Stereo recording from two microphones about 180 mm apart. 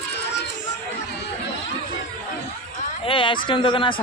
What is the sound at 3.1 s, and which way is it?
Speech, 30° left (ahead or behind).